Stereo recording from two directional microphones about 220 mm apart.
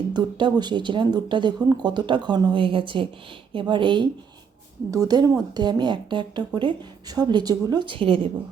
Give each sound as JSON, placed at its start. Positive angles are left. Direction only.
{"t": 0.1, "sound": "speech", "side_deg": -20}